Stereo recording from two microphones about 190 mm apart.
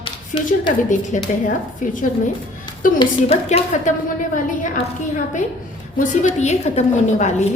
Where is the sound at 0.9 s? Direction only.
45° left (ahead or behind).